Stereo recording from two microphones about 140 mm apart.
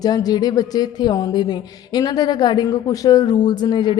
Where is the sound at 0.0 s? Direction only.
25° left (ahead or behind).